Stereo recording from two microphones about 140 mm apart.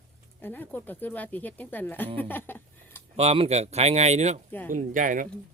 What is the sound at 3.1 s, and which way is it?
Speech, 45° right (ahead or behind).